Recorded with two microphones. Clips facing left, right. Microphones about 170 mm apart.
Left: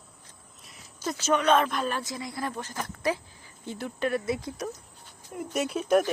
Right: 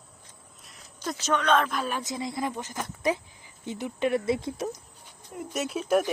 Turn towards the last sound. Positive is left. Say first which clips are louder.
# left 1 dB
turn(degrees=-5)  # may be behind; listen again after turning